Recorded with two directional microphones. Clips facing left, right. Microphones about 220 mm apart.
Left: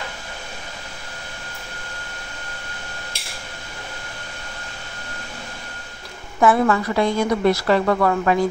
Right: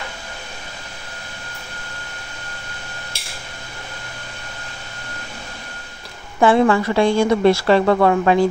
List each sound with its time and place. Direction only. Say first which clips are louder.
6.4 s a woman's voice: right 3 dB; 30° right (ahead or behind)